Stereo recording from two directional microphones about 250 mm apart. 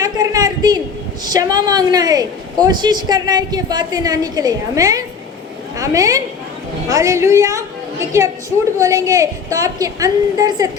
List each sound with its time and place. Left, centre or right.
0.0 s a sound: centre
1.2 s a woman's voice: centre
8.8 s a woman's voice: centre